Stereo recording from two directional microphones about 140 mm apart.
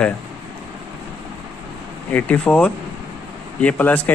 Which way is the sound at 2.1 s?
10° left (ahead or behind).